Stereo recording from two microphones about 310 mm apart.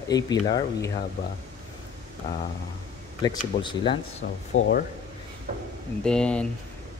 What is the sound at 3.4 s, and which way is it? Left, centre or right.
Speech, centre.